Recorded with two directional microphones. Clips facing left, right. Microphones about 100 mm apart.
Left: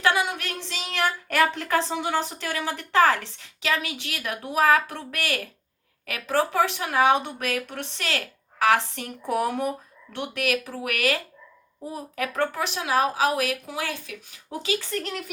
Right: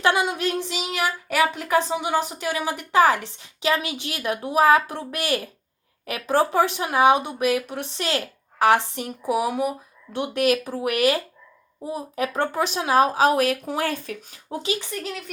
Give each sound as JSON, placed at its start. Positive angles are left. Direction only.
{"t": 0.0, "sound": "speech", "side_deg": -20}
{"t": 9.2, "sound": "speech", "side_deg": -5}
{"t": 10.1, "sound": "speech", "side_deg": -20}
{"t": 14.8, "sound": "speech", "side_deg": -5}